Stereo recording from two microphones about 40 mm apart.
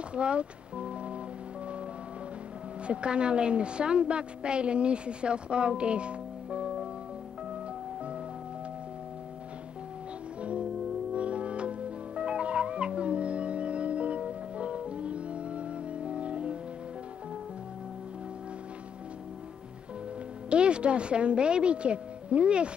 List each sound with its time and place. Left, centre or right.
0.1 s speech: right
2.9 s a woman's voice: right
10.4 s music: right
20.4 s a woman's voice: right